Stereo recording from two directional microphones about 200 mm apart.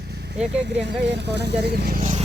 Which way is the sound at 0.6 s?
60° right (ahead or behind).